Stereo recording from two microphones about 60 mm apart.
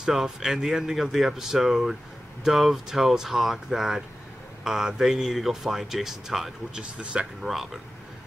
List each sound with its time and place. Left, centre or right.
0.0 s speech: centre
7.0 s speech: centre
7.4 s speech: centre